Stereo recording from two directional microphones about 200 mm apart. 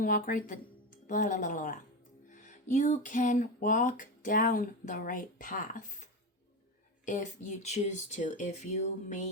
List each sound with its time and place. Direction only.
0.0 s a woman's voice: 45° left (ahead or behind)